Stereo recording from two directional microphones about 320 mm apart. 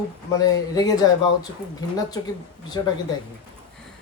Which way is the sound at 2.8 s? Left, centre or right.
Centre.